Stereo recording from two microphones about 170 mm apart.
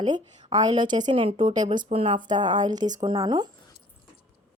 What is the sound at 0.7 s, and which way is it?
Speech, 25° right (ahead or behind).